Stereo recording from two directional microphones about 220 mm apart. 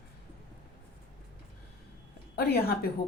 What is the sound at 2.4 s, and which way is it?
Speech, 45° left (ahead or behind).